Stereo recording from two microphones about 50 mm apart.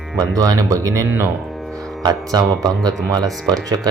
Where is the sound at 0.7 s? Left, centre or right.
Right.